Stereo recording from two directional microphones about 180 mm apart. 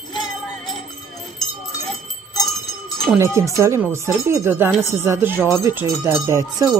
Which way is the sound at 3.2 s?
15° right (ahead or behind).